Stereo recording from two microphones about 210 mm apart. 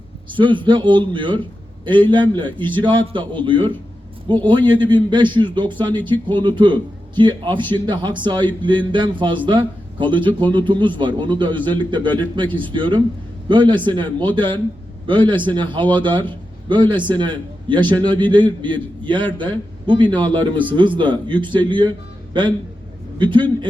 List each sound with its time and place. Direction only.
0.3 s a man's voice: 25° right (ahead or behind)